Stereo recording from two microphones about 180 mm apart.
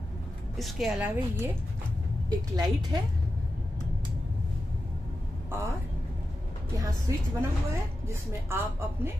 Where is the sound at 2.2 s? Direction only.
20° right (ahead or behind).